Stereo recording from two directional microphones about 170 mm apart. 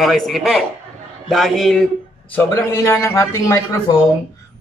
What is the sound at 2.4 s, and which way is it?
A man's voice, 15° left (ahead or behind).